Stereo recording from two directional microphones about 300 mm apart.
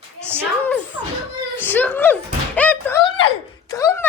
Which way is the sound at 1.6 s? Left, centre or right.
Centre.